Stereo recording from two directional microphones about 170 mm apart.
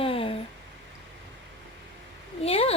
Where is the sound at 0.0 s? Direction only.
35° left (ahead or behind).